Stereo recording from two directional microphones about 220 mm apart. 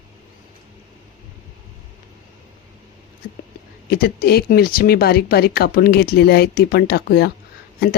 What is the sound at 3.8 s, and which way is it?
A woman's voice, 45° left (ahead or behind).